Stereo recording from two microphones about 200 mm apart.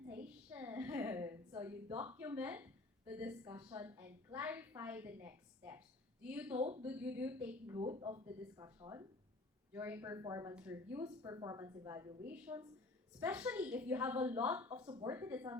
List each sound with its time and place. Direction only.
0.1 s a sound: 10° right (ahead or behind)
1.6 s a woman's voice: 10° right (ahead or behind)
6.6 s speech: 30° right (ahead or behind)
6.8 s a woman's voice: 10° right (ahead or behind)
7.9 s a woman's voice: 20° right (ahead or behind)
10.5 s a woman's voice: 5° right (ahead or behind)
11.2 s a woman's voice: 20° right (ahead or behind)
14.7 s speech: 25° right (ahead or behind)
15.1 s a woman's voice: 10° right (ahead or behind)